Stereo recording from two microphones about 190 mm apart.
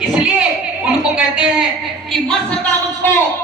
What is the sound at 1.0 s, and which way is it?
Speech, 5° right (ahead or behind).